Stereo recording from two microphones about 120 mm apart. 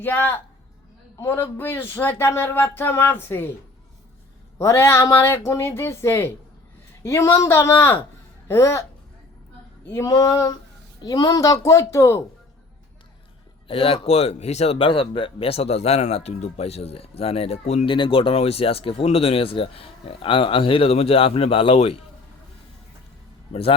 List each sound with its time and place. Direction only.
0.0 s a woman's voice: 15° left (ahead or behind)
4.5 s speech: 25° left (ahead or behind)
9.8 s speech: 25° left (ahead or behind)
13.7 s speech: 50° left (ahead or behind)
17.8 s speech: 45° left (ahead or behind)
23.5 s a man's voice: 50° left (ahead or behind)